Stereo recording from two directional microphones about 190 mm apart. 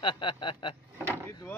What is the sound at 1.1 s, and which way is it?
Vehicle, 15° left (ahead or behind).